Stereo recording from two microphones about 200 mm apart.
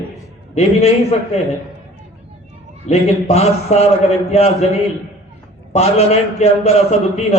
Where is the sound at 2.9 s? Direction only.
30° left (ahead or behind).